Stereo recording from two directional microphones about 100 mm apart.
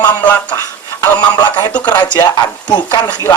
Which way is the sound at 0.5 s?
30° left (ahead or behind).